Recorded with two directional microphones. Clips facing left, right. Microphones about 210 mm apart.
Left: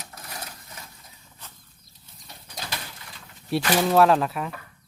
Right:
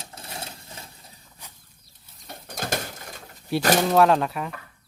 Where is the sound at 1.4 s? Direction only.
15° right (ahead or behind).